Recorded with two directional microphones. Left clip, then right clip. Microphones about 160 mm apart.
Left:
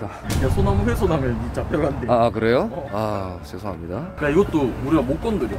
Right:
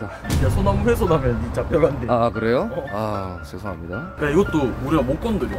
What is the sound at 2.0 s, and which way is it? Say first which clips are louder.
Speech: left 1 dB; 35° left (ahead or behind).